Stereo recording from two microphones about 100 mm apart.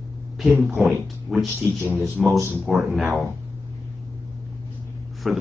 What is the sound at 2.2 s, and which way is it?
Speech, centre (ahead or behind).